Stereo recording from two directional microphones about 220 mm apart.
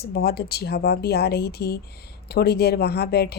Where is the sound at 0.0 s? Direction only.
45° left (ahead or behind).